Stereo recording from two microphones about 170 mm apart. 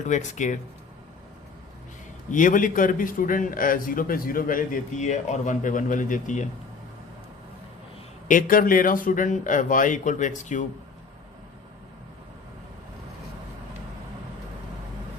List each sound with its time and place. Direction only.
0.0 s a man's voice: 45° left (ahead or behind)
2.3 s a man's voice: 50° left (ahead or behind)
8.3 s a man's voice: 55° left (ahead or behind)